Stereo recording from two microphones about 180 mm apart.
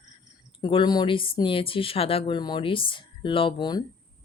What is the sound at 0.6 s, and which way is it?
A woman's voice, 25° left (ahead or behind).